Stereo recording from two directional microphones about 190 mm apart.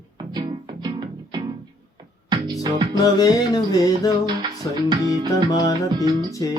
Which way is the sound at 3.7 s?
20° left (ahead or behind).